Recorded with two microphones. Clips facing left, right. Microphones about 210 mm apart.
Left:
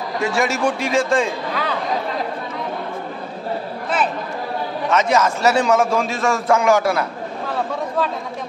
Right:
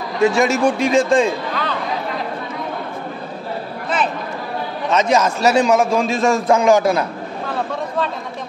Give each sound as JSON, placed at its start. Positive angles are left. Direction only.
{"t": 0.2, "sound": "a man's voice", "side_deg": -20}
{"t": 1.5, "sound": "speech", "side_deg": 10}
{"t": 4.9, "sound": "a man's voice", "side_deg": -20}